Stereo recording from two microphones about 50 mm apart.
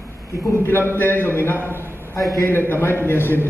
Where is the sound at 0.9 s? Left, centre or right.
Left.